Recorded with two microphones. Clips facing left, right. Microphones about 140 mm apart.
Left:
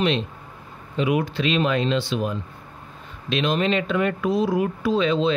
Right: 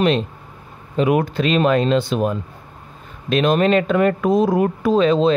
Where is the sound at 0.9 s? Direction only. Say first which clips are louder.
Right 5 dB; 50° right (ahead or behind).